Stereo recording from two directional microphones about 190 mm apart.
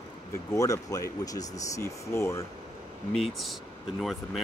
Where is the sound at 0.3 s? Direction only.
15° left (ahead or behind).